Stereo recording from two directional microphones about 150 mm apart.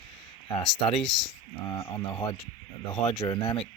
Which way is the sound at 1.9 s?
25° left (ahead or behind).